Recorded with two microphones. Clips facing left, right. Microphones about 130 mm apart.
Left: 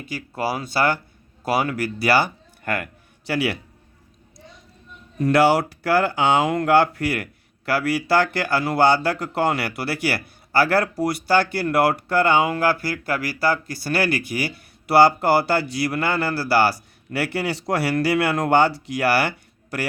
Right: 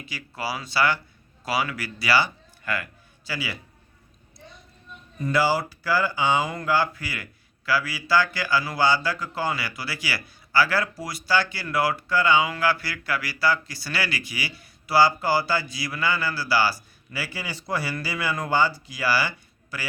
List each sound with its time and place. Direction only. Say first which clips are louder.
0.0 s a man's voice: left 6 dB; 50° left (ahead or behind); by 3.6 s 65° left (ahead or behind)
5.1 s speech: left 6 dB; 75° left (ahead or behind)